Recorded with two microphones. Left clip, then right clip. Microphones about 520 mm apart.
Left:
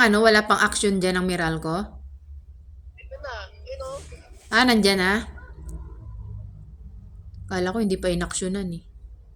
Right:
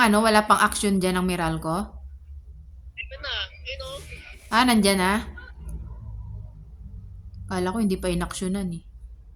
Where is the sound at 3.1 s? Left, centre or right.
Right.